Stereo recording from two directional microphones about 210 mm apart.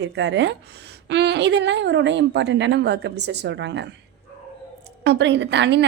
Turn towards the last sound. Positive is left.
turn(degrees=-55)  # may be behind; listen again after turning